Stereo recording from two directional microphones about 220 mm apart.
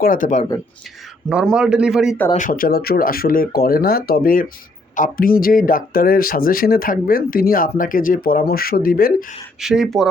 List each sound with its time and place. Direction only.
0.0 s speech: 40° left (ahead or behind)
1.3 s a man's voice: 5° right (ahead or behind)
2.3 s speech: 35° left (ahead or behind)
9.6 s a man's voice: centre (ahead or behind)